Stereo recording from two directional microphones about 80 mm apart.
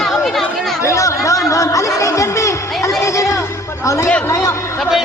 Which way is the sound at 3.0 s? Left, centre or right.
Left.